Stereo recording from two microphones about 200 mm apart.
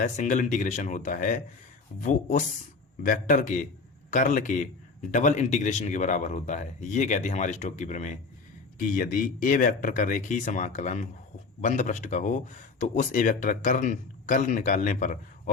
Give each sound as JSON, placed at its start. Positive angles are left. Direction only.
{"t": 0.0, "sound": "speech", "side_deg": 35}